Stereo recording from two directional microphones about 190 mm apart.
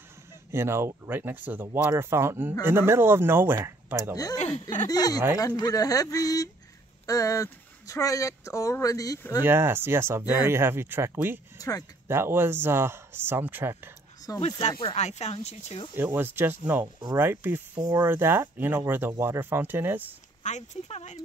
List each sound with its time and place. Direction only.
0.5 s speech: 15° right (ahead or behind)
4.4 s speech: 40° left (ahead or behind)
4.8 s speech: 20° left (ahead or behind)
9.4 s speech: 10° right (ahead or behind)
11.5 s speech: 20° left (ahead or behind)
12.1 s speech: 10° right (ahead or behind)
14.4 s speech: 30° left (ahead or behind)
15.9 s speech: 10° right (ahead or behind)
16.8 s speech: 20° right (ahead or behind)
17.2 s speech: 10° right (ahead or behind)
20.4 s speech: 40° left (ahead or behind)